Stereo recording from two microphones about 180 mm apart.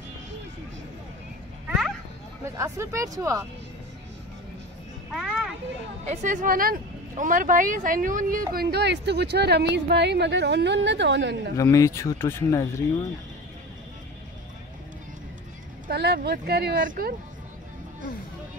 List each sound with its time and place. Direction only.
1.7 s a sound: 5° right (ahead or behind)
2.4 s speech: 15° right (ahead or behind)
5.1 s children playing: 5° right (ahead or behind)
6.0 s speech: 45° right (ahead or behind)
8.5 s a woman's voice: 65° right (ahead or behind)
11.5 s speech: 15° left (ahead or behind)
15.9 s speech: 65° right (ahead or behind)
16.8 s speech: 50° right (ahead or behind)